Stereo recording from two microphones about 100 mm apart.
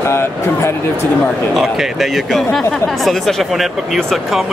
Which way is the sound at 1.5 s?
5° right (ahead or behind).